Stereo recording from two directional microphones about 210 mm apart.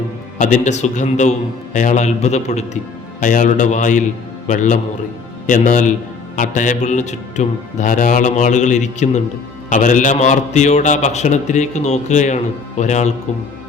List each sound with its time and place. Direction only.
0.3 s a man's voice: 35° left (ahead or behind)